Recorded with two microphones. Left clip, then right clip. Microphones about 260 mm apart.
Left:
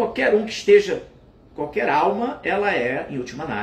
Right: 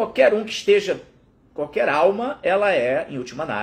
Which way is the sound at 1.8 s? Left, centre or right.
Centre.